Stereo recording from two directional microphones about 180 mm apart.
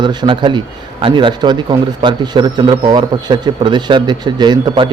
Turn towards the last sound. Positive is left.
turn(degrees=-25)  # may be behind; listen again after turning